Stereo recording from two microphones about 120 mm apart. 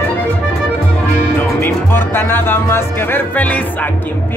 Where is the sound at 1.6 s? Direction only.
20° left (ahead or behind).